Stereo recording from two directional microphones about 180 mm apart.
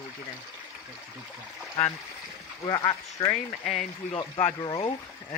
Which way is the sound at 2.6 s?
25° left (ahead or behind).